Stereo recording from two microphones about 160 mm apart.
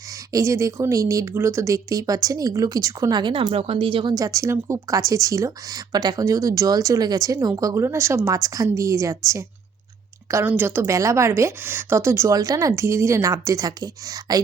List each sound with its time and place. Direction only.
0.3 s speech: 20° right (ahead or behind)
3.4 s speech: 40° right (ahead or behind)
4.1 s a woman's voice: 20° right (ahead or behind)